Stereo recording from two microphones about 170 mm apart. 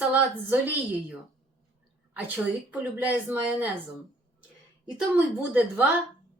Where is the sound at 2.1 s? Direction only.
10° right (ahead or behind).